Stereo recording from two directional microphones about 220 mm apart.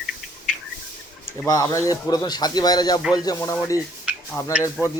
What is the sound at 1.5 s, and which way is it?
Speech, 15° left (ahead or behind).